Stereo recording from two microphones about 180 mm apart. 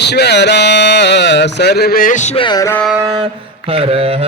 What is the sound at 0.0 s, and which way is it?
Speech, 70° left (ahead or behind).